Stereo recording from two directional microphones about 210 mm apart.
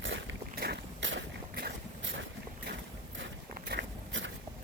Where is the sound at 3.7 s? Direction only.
55° right (ahead or behind).